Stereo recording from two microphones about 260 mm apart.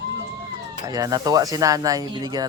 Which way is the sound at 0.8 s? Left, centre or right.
Centre.